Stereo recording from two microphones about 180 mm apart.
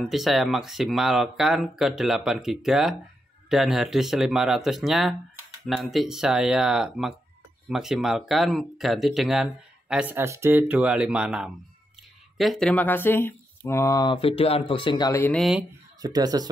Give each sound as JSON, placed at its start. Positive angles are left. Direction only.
{"t": 0.0, "sound": "speech", "side_deg": 0}
{"t": 15.3, "sound": "speech", "side_deg": 0}
{"t": 16.0, "sound": "speech", "side_deg": -20}